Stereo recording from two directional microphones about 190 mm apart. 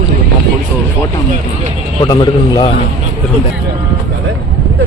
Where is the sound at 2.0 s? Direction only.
20° left (ahead or behind).